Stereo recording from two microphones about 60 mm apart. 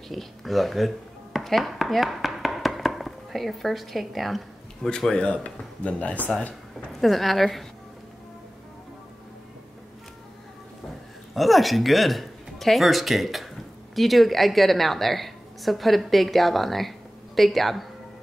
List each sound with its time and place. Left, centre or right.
0.1 s speech: centre
4.8 s speech: centre; by 6.3 s left
7.0 s a woman's voice: centre
11.3 s a woman's voice: centre